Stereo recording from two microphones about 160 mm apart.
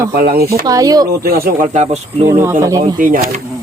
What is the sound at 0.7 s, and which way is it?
Speech, 25° right (ahead or behind).